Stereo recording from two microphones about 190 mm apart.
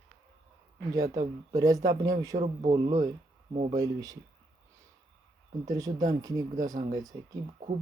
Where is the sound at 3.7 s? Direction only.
20° right (ahead or behind).